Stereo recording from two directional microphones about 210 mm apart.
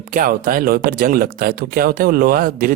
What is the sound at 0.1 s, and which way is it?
Speech, 40° right (ahead or behind).